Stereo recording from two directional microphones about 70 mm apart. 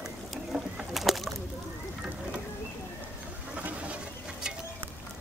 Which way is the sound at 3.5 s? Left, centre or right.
Centre.